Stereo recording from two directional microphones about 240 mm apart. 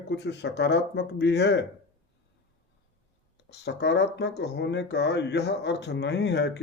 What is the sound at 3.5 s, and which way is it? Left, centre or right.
Speech, left.